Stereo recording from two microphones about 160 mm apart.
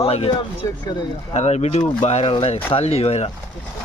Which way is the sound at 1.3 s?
45° left (ahead or behind).